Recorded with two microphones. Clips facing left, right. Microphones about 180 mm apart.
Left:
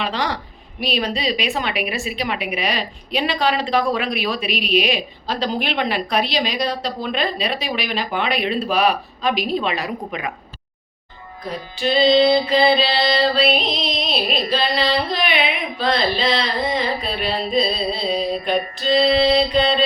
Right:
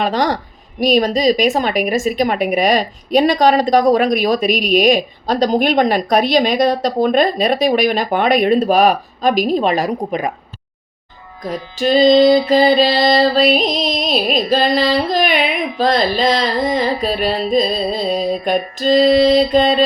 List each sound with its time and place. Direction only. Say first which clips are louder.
0.0 s music: right 7 dB; 45° right (ahead or behind)
11.4 s music: right 5 dB; 45° right (ahead or behind)